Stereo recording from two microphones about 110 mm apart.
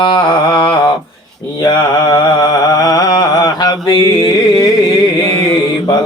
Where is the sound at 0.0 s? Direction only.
45° left (ahead or behind).